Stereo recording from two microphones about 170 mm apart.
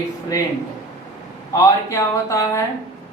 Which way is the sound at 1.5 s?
20° left (ahead or behind).